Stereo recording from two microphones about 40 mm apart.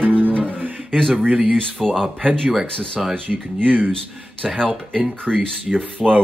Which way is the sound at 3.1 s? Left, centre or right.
Right.